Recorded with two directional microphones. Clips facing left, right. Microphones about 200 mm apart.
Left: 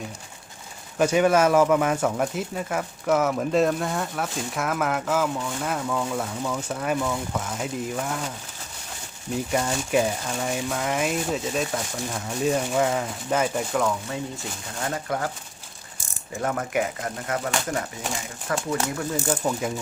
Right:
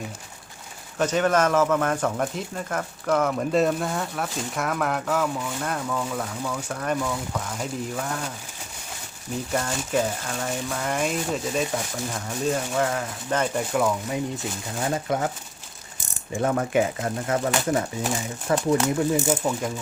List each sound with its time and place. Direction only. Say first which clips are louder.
0.9 s speech: left 2 dB; 10° left (ahead or behind)
9.5 s speech: left 2 dB; 10° left (ahead or behind)
14.8 s speech: right 3 dB; 20° right (ahead or behind)
16.4 s speech: right 3 dB; 30° right (ahead or behind)
18.4 s speech: right 5 dB; 25° right (ahead or behind)
19.3 s speech: right 1 dB; centre (ahead or behind)